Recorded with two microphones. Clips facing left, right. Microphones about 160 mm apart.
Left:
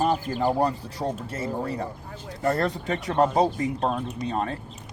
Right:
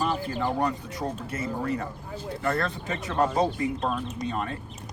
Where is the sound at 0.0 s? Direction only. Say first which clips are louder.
Left 4 dB; 40° left (ahead or behind).